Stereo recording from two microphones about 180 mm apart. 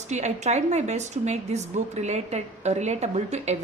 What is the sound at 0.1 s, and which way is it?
A woman's voice, 40° right (ahead or behind).